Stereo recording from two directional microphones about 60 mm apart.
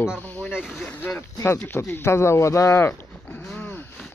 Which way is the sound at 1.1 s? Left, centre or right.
Left.